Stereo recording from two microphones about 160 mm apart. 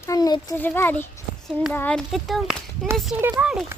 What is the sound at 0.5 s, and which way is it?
A child's voice, 10° left (ahead or behind).